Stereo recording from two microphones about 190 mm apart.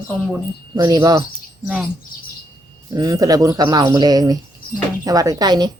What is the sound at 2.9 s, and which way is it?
Speech, 20° right (ahead or behind).